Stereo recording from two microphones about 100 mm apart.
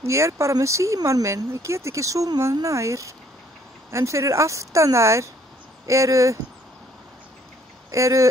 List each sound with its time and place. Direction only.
0.0 s speech: 30° right (ahead or behind)
7.9 s speech: 30° right (ahead or behind)